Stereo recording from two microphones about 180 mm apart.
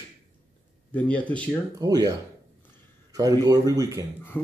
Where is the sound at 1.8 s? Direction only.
20° right (ahead or behind).